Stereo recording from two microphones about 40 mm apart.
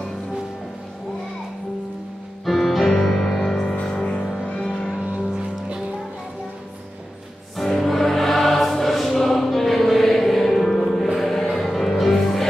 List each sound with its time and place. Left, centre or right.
2.4 s music: centre
3.8 s music: centre
4.9 s music: right
7.5 s music: centre